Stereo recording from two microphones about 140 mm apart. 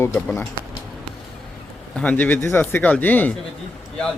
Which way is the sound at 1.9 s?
10° left (ahead or behind).